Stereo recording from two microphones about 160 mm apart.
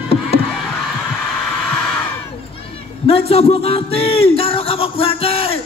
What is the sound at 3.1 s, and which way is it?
Speech, 40° left (ahead or behind).